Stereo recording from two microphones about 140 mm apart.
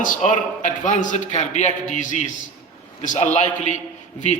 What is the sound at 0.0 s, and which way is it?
A man's voice, 70° left (ahead or behind).